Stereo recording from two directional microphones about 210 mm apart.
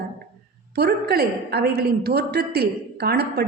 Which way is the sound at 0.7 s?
50° right (ahead or behind).